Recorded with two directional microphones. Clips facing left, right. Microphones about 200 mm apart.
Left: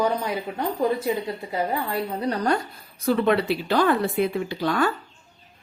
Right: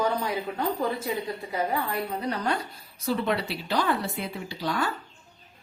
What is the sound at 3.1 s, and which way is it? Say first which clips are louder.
Speech: left 7 dB; 60° left (ahead or behind).